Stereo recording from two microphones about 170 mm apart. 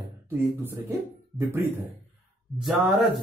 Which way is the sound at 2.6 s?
Centre (ahead or behind).